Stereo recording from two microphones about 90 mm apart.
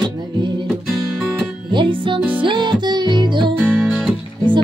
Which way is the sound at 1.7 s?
65° right (ahead or behind).